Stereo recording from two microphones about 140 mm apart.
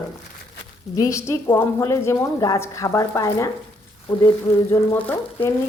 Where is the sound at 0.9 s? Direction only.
25° left (ahead or behind).